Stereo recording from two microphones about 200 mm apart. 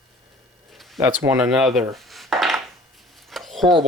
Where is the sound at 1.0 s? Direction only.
10° right (ahead or behind).